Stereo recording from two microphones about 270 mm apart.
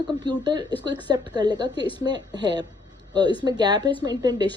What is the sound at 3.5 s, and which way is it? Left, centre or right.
A woman's voice, centre.